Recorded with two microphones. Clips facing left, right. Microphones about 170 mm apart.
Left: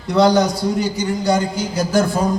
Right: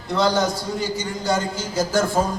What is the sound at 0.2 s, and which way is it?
Speech, 15° left (ahead or behind).